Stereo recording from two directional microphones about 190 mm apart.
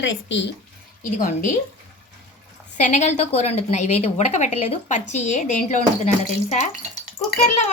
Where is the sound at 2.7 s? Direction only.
40° left (ahead or behind).